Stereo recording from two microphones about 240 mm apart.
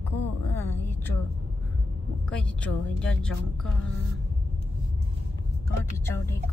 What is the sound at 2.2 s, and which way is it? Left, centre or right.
Speech, centre.